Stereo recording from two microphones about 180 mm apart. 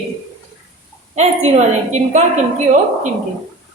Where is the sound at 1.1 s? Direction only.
40° right (ahead or behind).